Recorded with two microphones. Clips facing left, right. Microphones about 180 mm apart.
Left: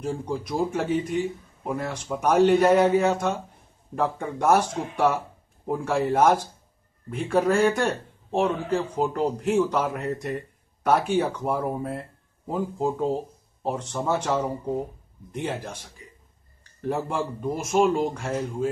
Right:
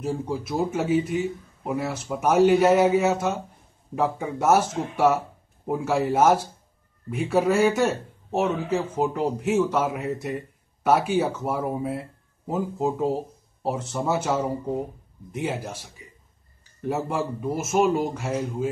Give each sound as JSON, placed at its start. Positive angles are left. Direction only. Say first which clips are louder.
{"t": 0.0, "sound": "a man's voice", "louder": "right 1 dB", "side_deg": -5}